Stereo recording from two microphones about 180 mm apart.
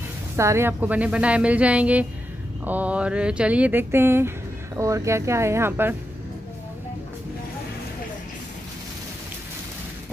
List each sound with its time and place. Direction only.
0.4 s speech: 15° right (ahead or behind)